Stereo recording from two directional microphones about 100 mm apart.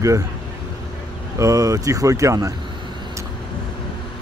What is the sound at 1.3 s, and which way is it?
Speech, 35° right (ahead or behind).